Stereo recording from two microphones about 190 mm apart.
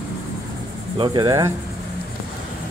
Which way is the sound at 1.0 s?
20° right (ahead or behind).